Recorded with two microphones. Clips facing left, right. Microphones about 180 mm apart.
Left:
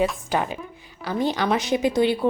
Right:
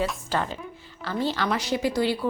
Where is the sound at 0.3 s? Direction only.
15° left (ahead or behind).